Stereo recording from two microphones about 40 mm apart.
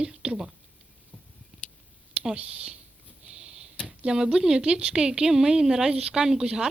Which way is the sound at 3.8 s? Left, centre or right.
Centre.